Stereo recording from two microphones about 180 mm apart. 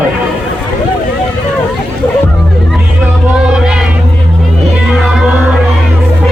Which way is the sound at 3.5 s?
5° right (ahead or behind).